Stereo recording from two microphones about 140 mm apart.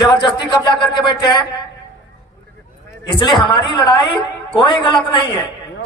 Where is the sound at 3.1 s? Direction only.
35° left (ahead or behind).